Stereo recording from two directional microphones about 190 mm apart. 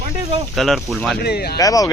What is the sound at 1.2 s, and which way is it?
Speech, 55° left (ahead or behind).